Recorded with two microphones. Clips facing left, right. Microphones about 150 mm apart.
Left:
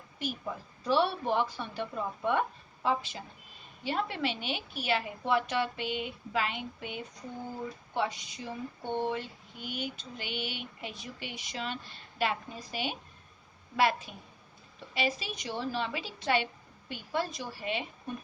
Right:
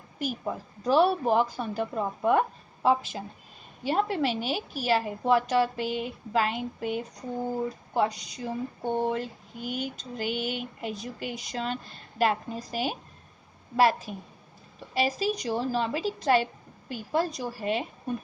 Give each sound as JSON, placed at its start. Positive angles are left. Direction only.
{"t": 0.9, "sound": "a woman's voice", "side_deg": -45}